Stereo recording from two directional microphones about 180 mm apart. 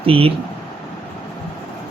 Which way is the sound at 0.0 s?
30° right (ahead or behind).